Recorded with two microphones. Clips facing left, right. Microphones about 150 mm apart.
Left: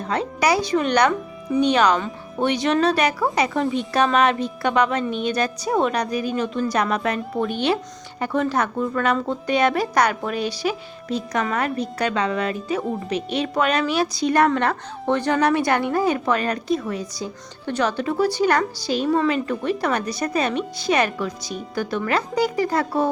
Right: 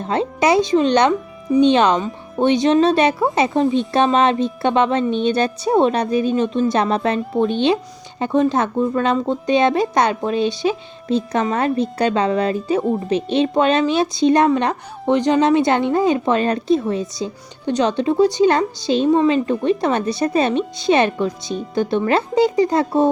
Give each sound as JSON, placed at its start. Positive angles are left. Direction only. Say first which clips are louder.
{"t": 0.0, "sound": "a woman's voice", "louder": "right 4 dB", "side_deg": -25}